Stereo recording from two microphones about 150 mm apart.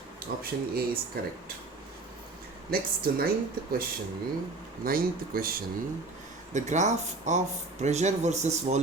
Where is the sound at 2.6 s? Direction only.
85° right.